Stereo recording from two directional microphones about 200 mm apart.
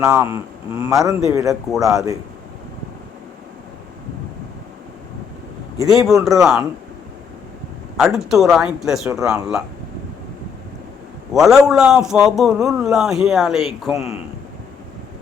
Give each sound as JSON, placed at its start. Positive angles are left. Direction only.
{"t": 0.1, "sound": "speech", "side_deg": -10}
{"t": 5.8, "sound": "speech", "side_deg": 0}
{"t": 7.9, "sound": "speech", "side_deg": 0}
{"t": 11.3, "sound": "speech", "side_deg": 0}